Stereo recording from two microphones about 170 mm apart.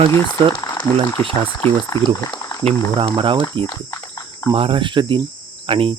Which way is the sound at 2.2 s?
20° left (ahead or behind).